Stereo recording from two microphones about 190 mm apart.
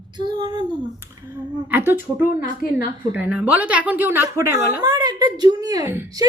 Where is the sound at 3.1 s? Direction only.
5° right (ahead or behind).